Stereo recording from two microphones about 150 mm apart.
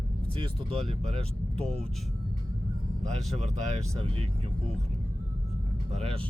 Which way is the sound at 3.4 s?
45° right (ahead or behind).